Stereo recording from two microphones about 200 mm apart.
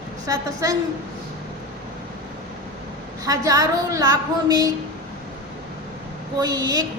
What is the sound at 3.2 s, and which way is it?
A woman's voice, 20° right (ahead or behind).